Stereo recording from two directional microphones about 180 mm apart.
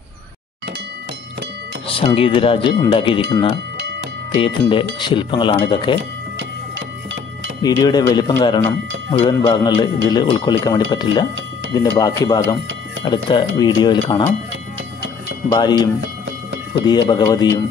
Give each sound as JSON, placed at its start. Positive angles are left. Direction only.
{"t": 2.0, "sound": "a man's voice", "side_deg": 30}
{"t": 7.6, "sound": "a man's voice", "side_deg": 20}
{"t": 15.5, "sound": "a man's voice", "side_deg": 25}
{"t": 16.0, "sound": "music", "side_deg": -90}
{"t": 16.8, "sound": "a man's voice", "side_deg": 25}